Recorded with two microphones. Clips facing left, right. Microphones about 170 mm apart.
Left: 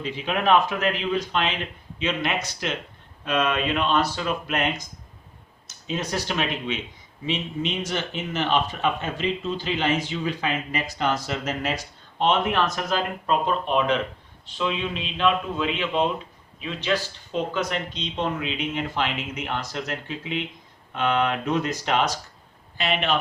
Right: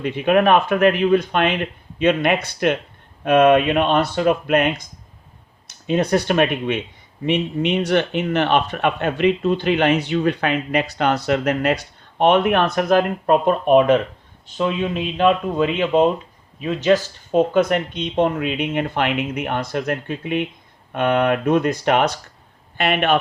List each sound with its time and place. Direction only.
0.0 s speech: 60° right (ahead or behind)